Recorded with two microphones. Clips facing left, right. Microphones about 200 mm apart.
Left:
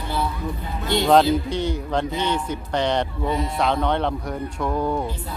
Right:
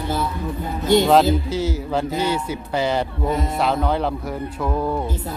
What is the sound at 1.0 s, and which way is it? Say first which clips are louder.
A man's voice: right 1 dB; 5° right (ahead or behind).